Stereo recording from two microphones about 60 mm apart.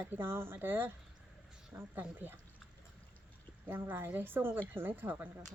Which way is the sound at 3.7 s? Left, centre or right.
Right.